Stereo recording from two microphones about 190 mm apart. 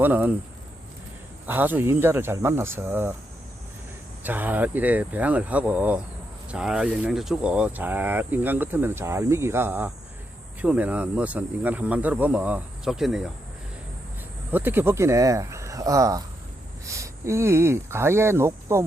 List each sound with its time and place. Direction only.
0.0 s speech: 10° right (ahead or behind)
1.5 s speech: 10° right (ahead or behind)
4.2 s speech: 10° right (ahead or behind)
14.5 s speech: 10° right (ahead or behind)